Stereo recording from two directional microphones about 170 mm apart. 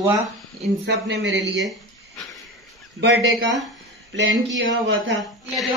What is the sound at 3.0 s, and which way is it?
Speech, 90° right.